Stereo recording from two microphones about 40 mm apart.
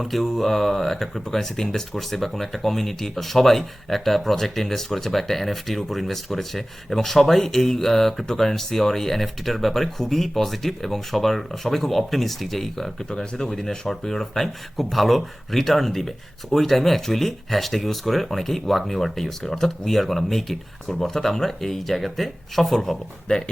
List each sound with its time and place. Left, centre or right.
0.0 s speech: centre
13.0 s speech: centre
13.5 s speech: centre
23.3 s speech: left